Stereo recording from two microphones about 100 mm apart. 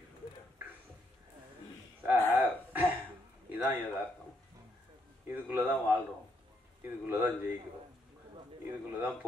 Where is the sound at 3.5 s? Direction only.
20° right (ahead or behind).